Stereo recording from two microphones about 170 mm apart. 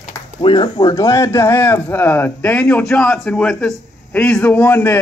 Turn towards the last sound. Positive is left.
turn(degrees=10)  # may be behind; listen again after turning